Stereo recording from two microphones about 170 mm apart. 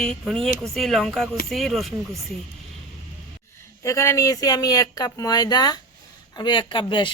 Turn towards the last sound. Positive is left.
turn(degrees=30)  # may be behind; listen again after turning